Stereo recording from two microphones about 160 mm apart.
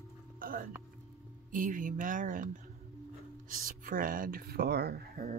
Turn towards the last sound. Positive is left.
turn(degrees=-85)